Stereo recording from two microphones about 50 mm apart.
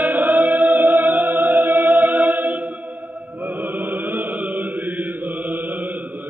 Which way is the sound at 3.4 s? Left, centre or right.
Right.